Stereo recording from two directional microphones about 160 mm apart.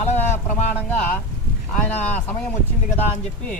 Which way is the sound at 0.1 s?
15° left (ahead or behind).